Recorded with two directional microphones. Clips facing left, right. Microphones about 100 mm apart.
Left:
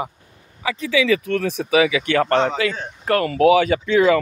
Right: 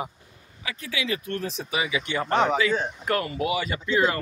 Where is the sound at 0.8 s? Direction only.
90° left.